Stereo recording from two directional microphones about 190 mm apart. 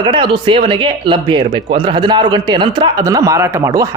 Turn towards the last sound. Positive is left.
turn(degrees=-15)  # may be behind; listen again after turning